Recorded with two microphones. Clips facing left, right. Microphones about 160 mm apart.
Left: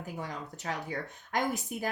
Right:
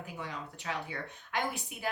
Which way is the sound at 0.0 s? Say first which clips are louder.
Left 2 dB; 40° left (ahead or behind).